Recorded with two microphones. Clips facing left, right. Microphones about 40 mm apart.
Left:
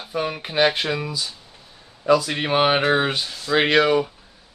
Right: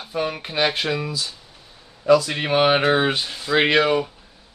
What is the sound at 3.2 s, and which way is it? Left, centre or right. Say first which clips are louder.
Speech: right 1 dB; right.